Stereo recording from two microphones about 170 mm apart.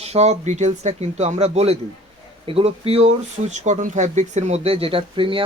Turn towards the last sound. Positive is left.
turn(degrees=-30)  # may be behind; listen again after turning